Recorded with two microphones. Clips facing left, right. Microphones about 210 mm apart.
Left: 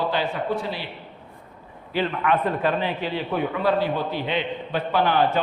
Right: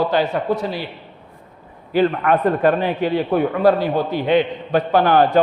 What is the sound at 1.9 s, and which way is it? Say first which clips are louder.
A man's voice: right 6 dB; 45° right (ahead or behind).